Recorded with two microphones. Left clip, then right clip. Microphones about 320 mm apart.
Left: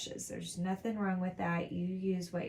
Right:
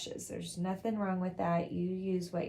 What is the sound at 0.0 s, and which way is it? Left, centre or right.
Speech, centre.